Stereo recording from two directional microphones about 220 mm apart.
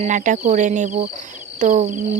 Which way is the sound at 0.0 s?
35° right (ahead or behind).